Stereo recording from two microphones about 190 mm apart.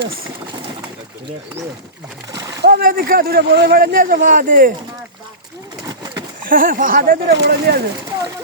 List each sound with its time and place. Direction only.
2.3 s splash: 20° right (ahead or behind)
2.6 s speech: 55° right (ahead or behind)
6.5 s speech: 45° right (ahead or behind); by 7.8 s 60° right (ahead or behind)